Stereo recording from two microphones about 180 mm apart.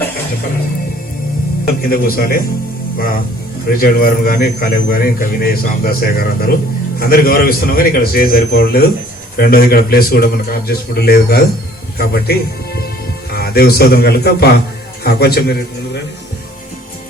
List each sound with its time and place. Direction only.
1.6 s speech: 55° left (ahead or behind)
3.8 s a man's voice: 55° left (ahead or behind)